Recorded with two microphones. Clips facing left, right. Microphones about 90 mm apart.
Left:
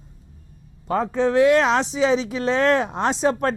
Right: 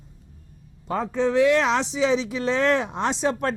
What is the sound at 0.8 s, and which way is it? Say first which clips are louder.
Speech: left 3 dB; 45° left (ahead or behind).